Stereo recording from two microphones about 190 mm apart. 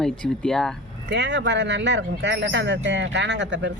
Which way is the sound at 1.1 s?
65° right (ahead or behind).